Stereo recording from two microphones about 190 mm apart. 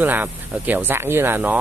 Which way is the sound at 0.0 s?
10° right (ahead or behind).